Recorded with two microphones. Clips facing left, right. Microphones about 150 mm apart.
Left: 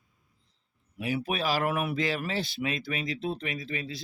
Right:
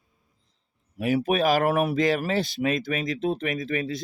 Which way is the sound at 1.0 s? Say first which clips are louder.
Right 8 dB; 45° right (ahead or behind).